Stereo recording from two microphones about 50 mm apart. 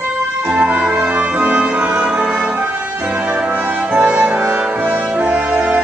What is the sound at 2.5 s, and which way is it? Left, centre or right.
Music, right.